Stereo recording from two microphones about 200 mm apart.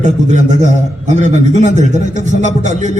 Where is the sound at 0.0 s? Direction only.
35° right (ahead or behind).